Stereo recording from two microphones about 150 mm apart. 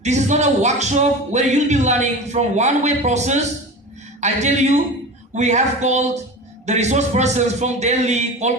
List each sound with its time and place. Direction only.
0.0 s speech: 50° right (ahead or behind)